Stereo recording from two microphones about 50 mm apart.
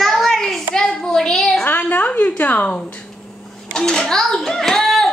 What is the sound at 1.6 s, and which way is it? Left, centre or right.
A woman's voice, left.